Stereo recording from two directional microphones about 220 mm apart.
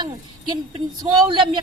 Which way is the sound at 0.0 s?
20° right (ahead or behind).